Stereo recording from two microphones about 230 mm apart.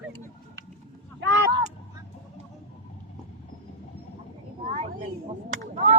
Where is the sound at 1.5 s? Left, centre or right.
Centre.